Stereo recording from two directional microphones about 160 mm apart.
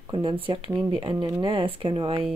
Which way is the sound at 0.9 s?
35° right (ahead or behind).